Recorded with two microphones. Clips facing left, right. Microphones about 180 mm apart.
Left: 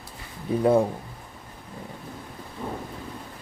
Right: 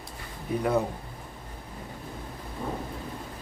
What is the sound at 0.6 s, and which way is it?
Speech, 30° left (ahead or behind).